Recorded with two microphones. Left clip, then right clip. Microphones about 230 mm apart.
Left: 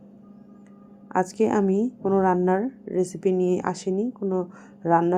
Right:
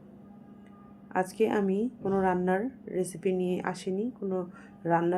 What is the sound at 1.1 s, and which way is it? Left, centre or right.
A woman's voice, left.